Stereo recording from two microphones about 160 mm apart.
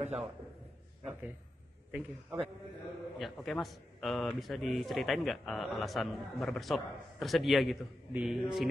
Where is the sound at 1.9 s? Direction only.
5° right (ahead or behind).